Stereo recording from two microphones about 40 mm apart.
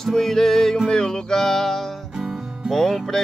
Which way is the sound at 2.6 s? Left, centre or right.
Centre.